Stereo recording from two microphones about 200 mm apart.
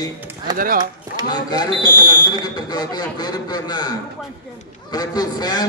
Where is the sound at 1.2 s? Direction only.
20° left (ahead or behind).